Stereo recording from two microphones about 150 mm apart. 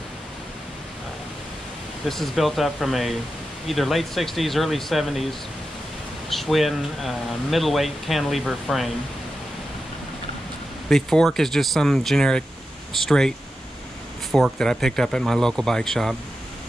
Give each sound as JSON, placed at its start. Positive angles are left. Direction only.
{"t": 2.0, "sound": "speech", "side_deg": 0}
{"t": 6.3, "sound": "speech", "side_deg": 0}
{"t": 10.9, "sound": "speech", "side_deg": 0}
{"t": 14.3, "sound": "speech", "side_deg": 5}